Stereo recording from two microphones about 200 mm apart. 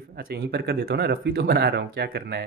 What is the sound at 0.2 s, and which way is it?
Speech, 50° right (ahead or behind).